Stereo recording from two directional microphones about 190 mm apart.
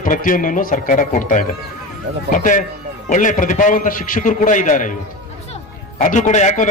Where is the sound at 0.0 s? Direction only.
45° left (ahead or behind).